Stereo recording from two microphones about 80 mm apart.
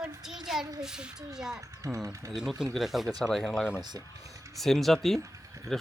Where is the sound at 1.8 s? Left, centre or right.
Right.